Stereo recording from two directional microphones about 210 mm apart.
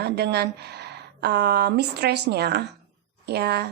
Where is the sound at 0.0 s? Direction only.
50° right (ahead or behind).